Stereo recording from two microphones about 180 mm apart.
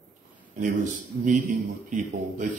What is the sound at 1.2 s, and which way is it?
Speech, 45° right (ahead or behind).